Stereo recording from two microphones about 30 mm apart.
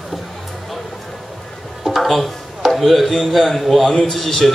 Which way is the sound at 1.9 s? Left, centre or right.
Centre.